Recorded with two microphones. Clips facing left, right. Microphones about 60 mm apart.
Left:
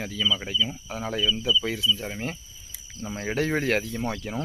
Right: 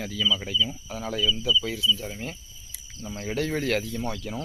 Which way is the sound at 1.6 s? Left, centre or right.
Left.